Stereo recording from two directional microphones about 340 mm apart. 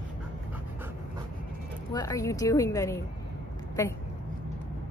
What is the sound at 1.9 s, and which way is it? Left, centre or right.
A woman's voice, centre.